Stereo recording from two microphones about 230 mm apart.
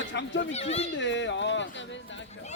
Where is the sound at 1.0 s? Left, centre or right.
Left.